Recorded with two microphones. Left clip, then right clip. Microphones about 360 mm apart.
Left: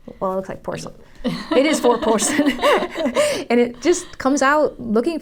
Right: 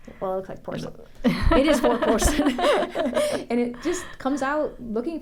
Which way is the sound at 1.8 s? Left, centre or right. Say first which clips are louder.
Left 4 dB; right.